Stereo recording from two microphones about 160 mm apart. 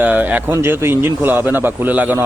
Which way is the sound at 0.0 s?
10° right (ahead or behind).